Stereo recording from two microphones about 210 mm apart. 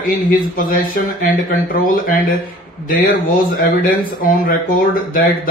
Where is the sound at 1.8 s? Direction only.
40° left (ahead or behind).